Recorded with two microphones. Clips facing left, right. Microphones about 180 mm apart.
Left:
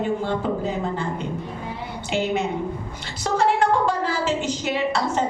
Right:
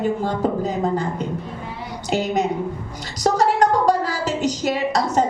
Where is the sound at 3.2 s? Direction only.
40° right (ahead or behind).